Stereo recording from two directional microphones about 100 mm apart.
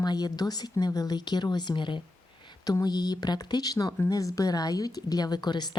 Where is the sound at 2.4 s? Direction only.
50° left (ahead or behind).